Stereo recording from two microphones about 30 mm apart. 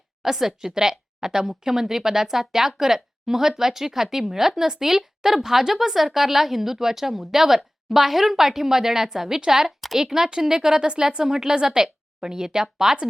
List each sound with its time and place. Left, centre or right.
0.2 s a woman's voice: centre